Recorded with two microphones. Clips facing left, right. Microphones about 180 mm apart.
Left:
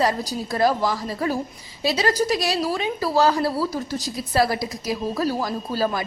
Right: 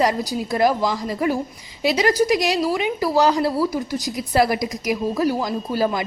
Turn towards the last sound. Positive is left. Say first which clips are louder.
# right 2 dB
turn(degrees=-15)  # may be behind; listen again after turning